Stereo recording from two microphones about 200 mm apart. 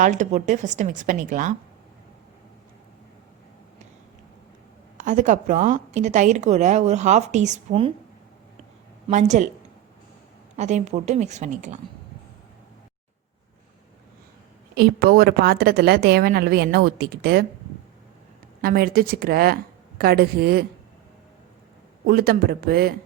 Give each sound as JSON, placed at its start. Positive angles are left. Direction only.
{"t": 0.0, "sound": "a woman's voice", "side_deg": -35}
{"t": 5.0, "sound": "a woman's voice", "side_deg": -40}
{"t": 9.0, "sound": "a woman's voice", "side_deg": -35}
{"t": 10.6, "sound": "a woman's voice", "side_deg": -35}
{"t": 14.8, "sound": "a woman's voice", "side_deg": -50}
{"t": 18.6, "sound": "a woman's voice", "side_deg": -50}
{"t": 22.0, "sound": "a woman's voice", "side_deg": -50}